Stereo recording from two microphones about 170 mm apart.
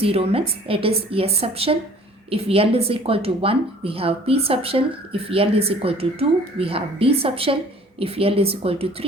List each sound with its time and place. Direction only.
0.0 s a woman's voice: 35° right (ahead or behind)